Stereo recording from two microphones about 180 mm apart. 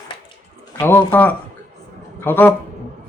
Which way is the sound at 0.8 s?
10° left (ahead or behind).